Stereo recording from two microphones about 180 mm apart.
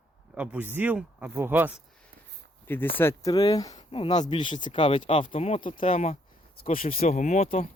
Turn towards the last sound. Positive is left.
turn(degrees=40)  # may be behind; listen again after turning